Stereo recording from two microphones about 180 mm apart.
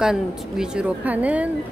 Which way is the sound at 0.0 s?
5° right (ahead or behind).